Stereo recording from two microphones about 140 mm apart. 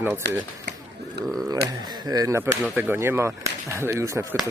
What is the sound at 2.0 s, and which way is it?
Speech, 25° right (ahead or behind).